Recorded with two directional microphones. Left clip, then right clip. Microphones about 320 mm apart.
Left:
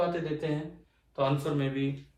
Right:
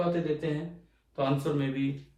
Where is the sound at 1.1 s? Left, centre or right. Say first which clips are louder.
Even; centre.